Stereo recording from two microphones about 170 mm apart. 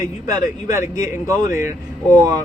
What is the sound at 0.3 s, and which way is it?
Speech, 20° right (ahead or behind).